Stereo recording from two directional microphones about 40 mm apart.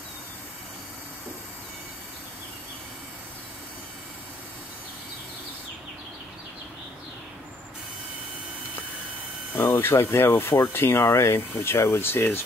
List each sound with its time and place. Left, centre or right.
9.7 s speech: left